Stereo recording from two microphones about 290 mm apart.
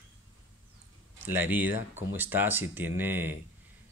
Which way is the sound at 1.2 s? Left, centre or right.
Centre.